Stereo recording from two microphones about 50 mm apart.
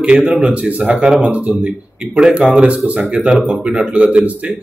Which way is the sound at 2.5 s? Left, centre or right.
Right.